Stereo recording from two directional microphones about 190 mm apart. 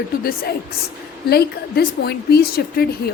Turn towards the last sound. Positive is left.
turn(degrees=55)  # may be behind; listen again after turning